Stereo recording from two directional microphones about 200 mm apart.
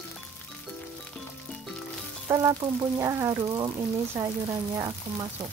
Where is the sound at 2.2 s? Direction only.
15° right (ahead or behind).